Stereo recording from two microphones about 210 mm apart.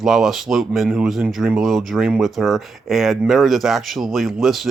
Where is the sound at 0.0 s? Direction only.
Centre (ahead or behind).